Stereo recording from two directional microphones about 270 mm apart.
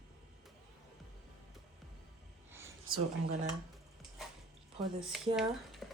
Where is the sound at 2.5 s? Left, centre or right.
Centre.